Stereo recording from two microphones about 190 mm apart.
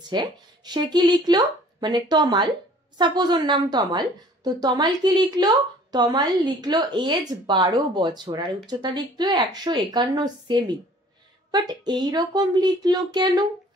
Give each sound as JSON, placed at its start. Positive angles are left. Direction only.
{"t": 0.1, "sound": "a woman's voice", "side_deg": -25}